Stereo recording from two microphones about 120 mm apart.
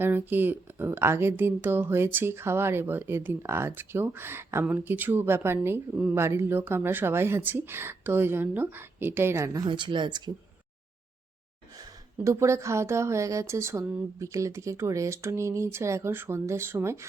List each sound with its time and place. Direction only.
0.0 s speech: 15° right (ahead or behind)
9.6 s speech: 40° right (ahead or behind)
11.8 s speech: 25° right (ahead or behind)